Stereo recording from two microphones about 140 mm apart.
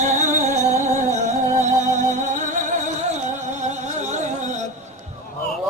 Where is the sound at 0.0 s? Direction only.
60° right (ahead or behind).